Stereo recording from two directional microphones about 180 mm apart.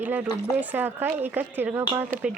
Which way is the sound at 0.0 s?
10° right (ahead or behind).